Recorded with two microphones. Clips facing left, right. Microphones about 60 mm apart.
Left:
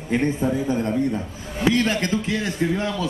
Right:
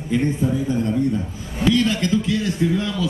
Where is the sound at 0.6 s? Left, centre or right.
Left.